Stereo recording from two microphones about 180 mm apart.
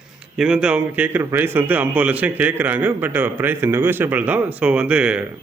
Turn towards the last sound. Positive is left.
turn(degrees=-5)  # may be behind; listen again after turning